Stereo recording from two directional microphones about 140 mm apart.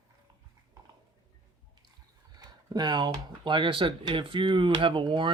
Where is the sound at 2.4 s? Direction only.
30° right (ahead or behind).